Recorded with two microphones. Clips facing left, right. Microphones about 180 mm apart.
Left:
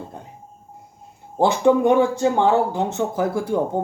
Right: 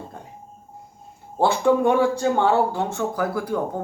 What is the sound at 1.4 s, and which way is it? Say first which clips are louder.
Speech: left 2 dB; 20° left (ahead or behind).